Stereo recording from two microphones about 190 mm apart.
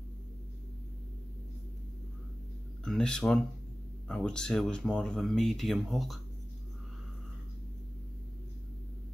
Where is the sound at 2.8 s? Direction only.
5° left (ahead or behind).